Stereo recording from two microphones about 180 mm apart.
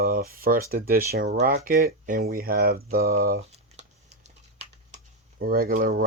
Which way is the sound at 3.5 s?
35° right (ahead or behind).